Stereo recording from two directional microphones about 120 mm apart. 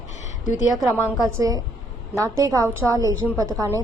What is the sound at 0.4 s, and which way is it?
Speech, 90° left.